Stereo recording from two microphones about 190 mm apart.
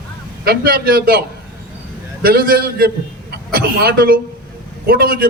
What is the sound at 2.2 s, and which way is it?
A man's voice, 50° right (ahead or behind).